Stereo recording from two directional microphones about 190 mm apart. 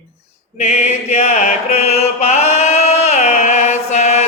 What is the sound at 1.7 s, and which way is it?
Chant, 35° left (ahead or behind).